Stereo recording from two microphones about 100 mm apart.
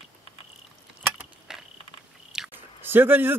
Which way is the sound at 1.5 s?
5° right (ahead or behind).